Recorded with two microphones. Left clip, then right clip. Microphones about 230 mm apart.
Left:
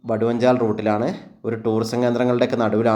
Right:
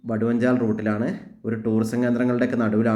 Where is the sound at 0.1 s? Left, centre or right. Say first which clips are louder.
Left 5 dB; centre.